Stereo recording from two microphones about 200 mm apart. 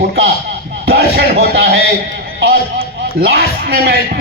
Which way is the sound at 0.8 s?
50° right (ahead or behind).